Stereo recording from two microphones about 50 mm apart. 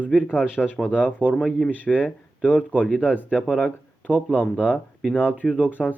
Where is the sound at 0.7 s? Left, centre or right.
Left.